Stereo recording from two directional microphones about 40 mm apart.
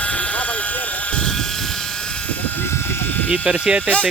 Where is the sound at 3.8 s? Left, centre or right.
Left.